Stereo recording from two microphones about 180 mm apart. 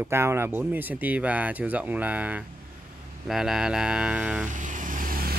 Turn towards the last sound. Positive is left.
turn(degrees=-50)  # may be behind; listen again after turning